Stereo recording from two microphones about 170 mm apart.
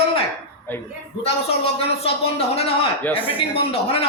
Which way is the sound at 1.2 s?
35° left (ahead or behind).